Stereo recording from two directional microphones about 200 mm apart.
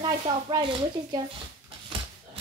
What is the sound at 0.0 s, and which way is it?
Speech, 20° right (ahead or behind).